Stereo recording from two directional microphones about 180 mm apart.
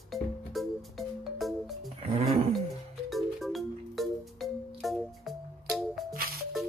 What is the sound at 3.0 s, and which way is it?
Music, centre (ahead or behind).